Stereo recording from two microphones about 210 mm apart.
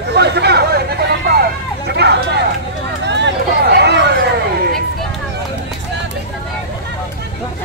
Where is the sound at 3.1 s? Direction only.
55° right (ahead or behind).